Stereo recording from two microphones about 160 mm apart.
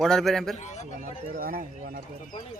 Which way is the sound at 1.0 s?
60° right (ahead or behind).